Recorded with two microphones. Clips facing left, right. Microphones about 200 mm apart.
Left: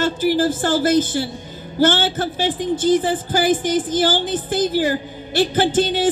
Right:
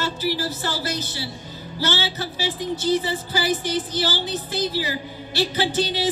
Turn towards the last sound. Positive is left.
turn(degrees=50)  # may be behind; listen again after turning